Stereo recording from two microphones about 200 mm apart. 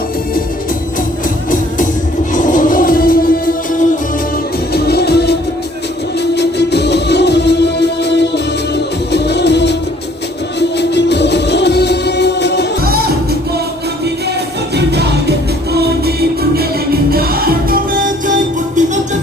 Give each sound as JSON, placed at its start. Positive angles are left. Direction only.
{"t": 2.3, "sound": "music", "side_deg": 40}
{"t": 12.8, "sound": "music", "side_deg": -50}
{"t": 14.8, "sound": "music", "side_deg": -55}